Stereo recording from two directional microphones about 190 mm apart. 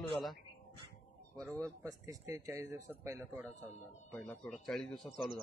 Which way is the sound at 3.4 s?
10° left (ahead or behind).